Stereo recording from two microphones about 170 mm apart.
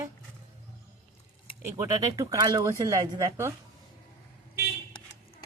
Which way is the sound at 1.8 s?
20° right (ahead or behind).